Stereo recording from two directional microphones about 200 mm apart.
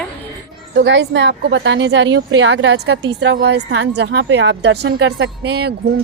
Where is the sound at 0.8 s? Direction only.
65° right (ahead or behind).